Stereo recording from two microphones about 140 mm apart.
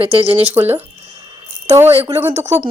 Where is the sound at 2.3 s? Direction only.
55° right (ahead or behind).